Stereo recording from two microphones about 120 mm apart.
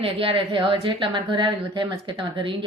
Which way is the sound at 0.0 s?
50° right (ahead or behind).